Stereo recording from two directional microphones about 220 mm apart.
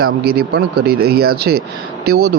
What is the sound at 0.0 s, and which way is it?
A man's voice, 45° right (ahead or behind).